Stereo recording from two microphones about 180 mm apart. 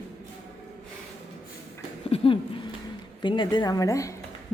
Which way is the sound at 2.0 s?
30° left (ahead or behind).